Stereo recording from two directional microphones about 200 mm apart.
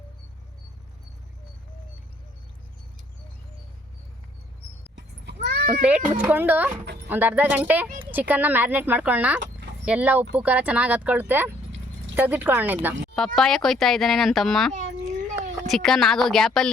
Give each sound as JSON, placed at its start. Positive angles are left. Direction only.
{"t": 4.9, "sound": "sheep", "side_deg": -55}
{"t": 5.8, "sound": "speech", "side_deg": -10}
{"t": 13.1, "sound": "speech", "side_deg": 0}
{"t": 14.7, "sound": "a sound", "side_deg": -40}
{"t": 15.6, "sound": "speech", "side_deg": 0}